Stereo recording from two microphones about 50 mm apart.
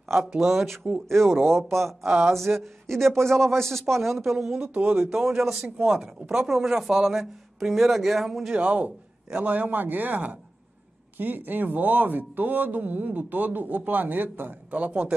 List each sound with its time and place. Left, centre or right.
0.4 s speech: centre
2.5 s a man's voice: centre
4.7 s speech: right
5.0 s a man's voice: centre
8.5 s speech: right
14.7 s speech: right